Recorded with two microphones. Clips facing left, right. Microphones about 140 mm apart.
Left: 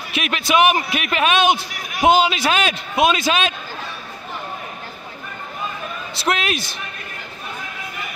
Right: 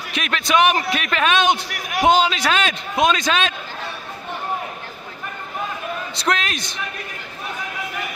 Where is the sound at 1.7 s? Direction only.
80° right.